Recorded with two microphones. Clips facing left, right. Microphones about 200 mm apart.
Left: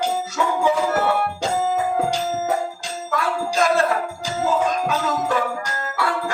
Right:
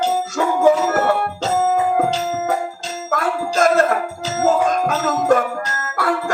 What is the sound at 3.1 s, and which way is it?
Music, 50° right (ahead or behind).